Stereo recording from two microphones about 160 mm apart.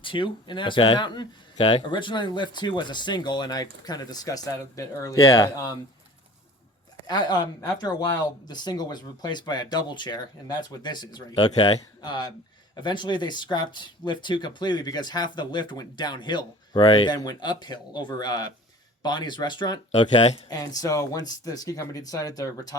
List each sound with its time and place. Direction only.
0.0 s speech: 30° left (ahead or behind)
7.1 s speech: 25° left (ahead or behind)
19.9 s speech: 40° left (ahead or behind)
20.5 s speech: 25° left (ahead or behind)